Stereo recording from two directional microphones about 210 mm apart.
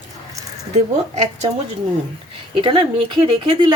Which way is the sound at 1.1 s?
30° right (ahead or behind).